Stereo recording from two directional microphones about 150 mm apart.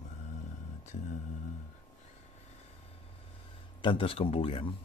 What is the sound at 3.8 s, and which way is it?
Speech, 35° left (ahead or behind).